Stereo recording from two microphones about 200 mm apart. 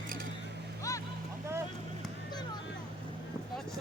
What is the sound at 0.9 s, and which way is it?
Boat, 15° left (ahead or behind).